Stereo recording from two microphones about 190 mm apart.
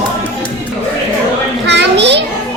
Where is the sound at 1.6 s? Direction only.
65° right (ahead or behind).